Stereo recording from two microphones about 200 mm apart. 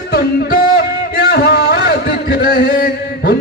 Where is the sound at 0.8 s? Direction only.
50° left (ahead or behind).